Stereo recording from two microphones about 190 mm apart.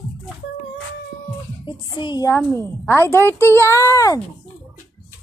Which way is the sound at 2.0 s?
25° left (ahead or behind).